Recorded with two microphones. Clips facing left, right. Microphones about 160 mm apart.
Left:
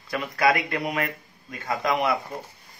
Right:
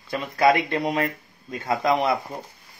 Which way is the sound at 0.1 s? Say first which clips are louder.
Right 3 dB; 25° right (ahead or behind).